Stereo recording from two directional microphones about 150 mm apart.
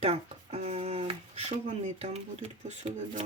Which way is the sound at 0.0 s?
40° right (ahead or behind).